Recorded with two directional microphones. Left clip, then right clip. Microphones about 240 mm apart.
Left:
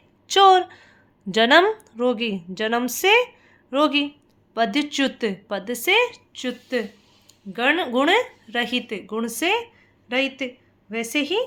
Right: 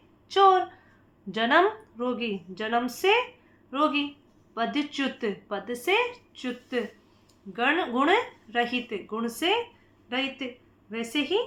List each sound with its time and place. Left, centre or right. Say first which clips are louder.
0.3 s a woman's voice: left 5 dB; left